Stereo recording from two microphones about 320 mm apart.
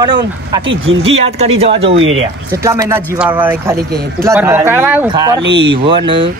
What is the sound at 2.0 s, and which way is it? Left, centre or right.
Speech, right.